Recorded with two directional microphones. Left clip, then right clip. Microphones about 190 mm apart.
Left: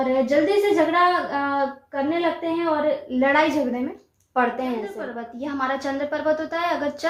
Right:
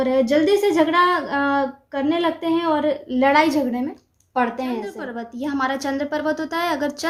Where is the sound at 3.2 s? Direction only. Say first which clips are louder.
Right 3 dB; 35° right (ahead or behind).